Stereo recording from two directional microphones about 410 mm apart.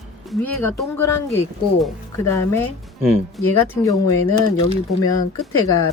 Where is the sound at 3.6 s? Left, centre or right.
Centre.